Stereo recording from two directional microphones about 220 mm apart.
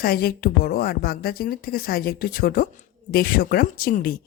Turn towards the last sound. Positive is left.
turn(degrees=40)  # may be behind; listen again after turning